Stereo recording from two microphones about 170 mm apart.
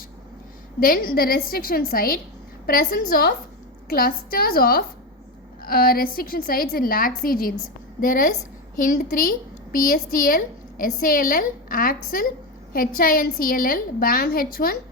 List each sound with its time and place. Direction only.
0.8 s a woman's voice: 60° left (ahead or behind)